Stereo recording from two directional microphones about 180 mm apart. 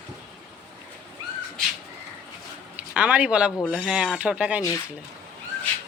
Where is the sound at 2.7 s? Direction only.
5° right (ahead or behind).